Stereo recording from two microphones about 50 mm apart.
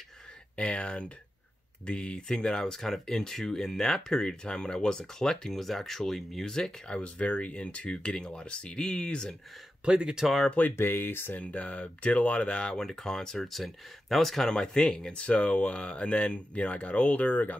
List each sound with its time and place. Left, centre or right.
0.6 s speech: left
7.0 s speech: left
9.8 s speech: centre
10.8 s speech: left
11.3 s speech: left
12.7 s speech: centre
14.5 s speech: centre; by 17.6 s left